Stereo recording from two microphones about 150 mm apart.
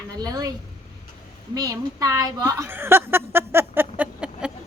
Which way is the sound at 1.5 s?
25° right (ahead or behind).